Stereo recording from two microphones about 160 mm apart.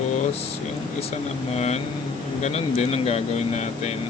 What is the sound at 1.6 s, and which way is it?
Speech, 45° left (ahead or behind).